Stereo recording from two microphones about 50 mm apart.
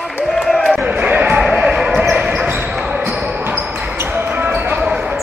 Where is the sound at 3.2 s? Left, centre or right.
Right.